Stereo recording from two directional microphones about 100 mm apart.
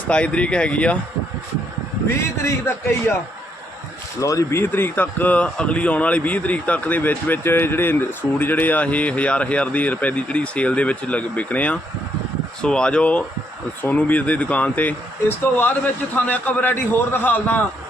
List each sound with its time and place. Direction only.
0.1 s speech: 10° left (ahead or behind)
2.4 s a man's voice: 25° left (ahead or behind)
4.2 s speech: 35° left (ahead or behind)
4.6 s speech: 20° left (ahead or behind)
16.1 s speech: 15° left (ahead or behind)